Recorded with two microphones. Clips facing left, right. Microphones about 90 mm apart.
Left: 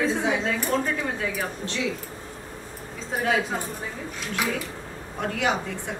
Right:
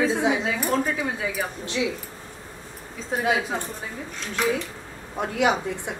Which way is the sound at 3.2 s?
5° right (ahead or behind).